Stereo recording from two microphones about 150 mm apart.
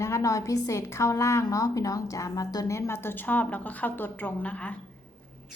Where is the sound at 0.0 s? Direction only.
20° left (ahead or behind).